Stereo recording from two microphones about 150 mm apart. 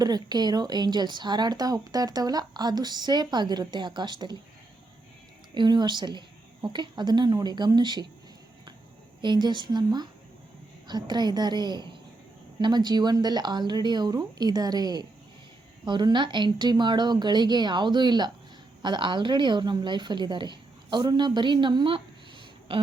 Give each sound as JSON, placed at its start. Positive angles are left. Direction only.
{"t": 0.0, "sound": "speech", "side_deg": -25}
{"t": 5.5, "sound": "speech", "side_deg": -30}
{"t": 9.2, "sound": "a woman's voice", "side_deg": -30}
{"t": 22.7, "sound": "throat clearing", "side_deg": -40}